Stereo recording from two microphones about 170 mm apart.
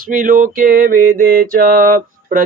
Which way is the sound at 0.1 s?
55° right (ahead or behind).